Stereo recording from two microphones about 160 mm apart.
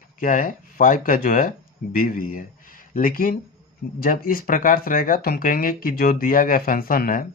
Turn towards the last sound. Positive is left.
turn(degrees=60)  # may be behind; listen again after turning